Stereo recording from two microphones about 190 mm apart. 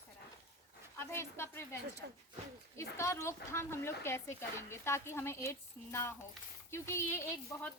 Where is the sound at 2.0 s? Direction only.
60° right (ahead or behind).